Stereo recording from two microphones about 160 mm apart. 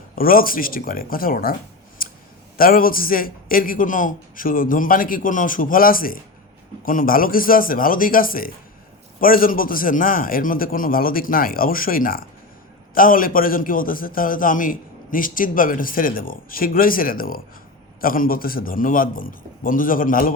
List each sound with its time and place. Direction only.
0.2 s a man's voice: 65° left (ahead or behind)
2.0 s clicking: 65° left (ahead or behind)
2.6 s a man's voice: 65° left (ahead or behind)